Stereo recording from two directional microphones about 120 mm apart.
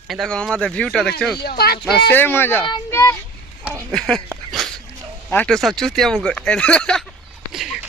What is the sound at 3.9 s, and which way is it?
Speech, 5° left (ahead or behind).